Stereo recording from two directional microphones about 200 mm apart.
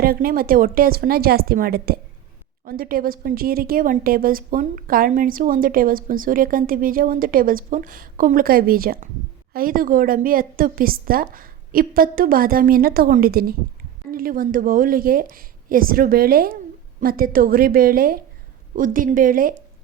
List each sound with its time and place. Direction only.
0.0 s a woman's voice: 50° right (ahead or behind)